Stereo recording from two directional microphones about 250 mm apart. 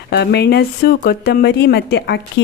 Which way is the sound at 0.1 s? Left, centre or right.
Left.